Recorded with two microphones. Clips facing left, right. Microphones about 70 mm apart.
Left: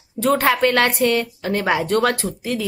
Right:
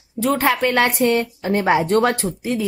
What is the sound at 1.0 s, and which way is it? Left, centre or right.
Speech, right.